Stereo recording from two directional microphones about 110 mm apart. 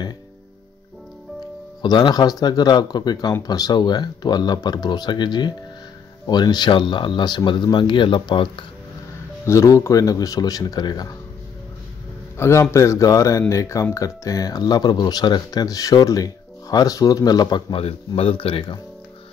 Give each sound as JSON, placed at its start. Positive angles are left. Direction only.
{"t": 1.8, "sound": "speech", "side_deg": 40}
{"t": 9.5, "sound": "speech", "side_deg": 30}
{"t": 12.4, "sound": "speech", "side_deg": 25}
{"t": 17.7, "sound": "speech", "side_deg": 60}